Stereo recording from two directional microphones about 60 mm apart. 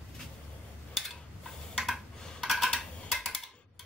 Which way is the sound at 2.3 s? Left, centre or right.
Centre.